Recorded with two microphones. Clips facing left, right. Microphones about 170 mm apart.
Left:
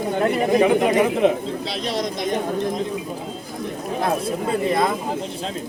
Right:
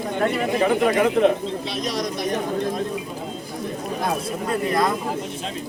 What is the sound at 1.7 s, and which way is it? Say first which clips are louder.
Speech: left 1 dB; 30° left (ahead or behind).